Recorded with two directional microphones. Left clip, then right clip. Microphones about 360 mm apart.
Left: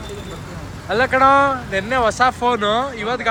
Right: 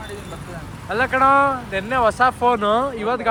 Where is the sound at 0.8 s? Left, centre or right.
Centre.